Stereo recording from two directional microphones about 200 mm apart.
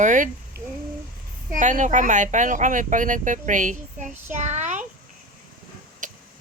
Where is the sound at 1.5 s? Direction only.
40° right (ahead or behind).